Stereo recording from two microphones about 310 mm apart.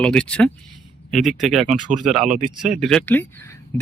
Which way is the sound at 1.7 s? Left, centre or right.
Right.